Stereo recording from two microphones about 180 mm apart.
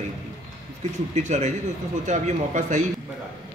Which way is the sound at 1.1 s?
40° right (ahead or behind).